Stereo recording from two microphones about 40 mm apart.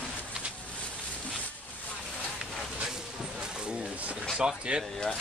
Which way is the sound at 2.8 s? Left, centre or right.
Centre.